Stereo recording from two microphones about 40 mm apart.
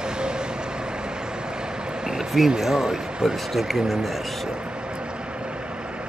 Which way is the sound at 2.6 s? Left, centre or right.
Centre.